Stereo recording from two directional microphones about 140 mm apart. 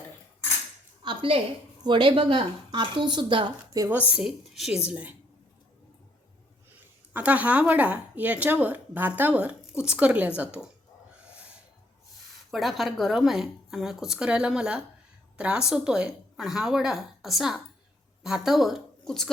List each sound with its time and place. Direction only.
1.0 s a sound: 40° right (ahead or behind)
1.8 s speech: 35° right (ahead or behind)
4.1 s a woman's voice: 5° right (ahead or behind)
4.9 s speech: 10° right (ahead or behind)
7.1 s speech: 10° right (ahead or behind)
12.5 s a woman's voice: centre (ahead or behind)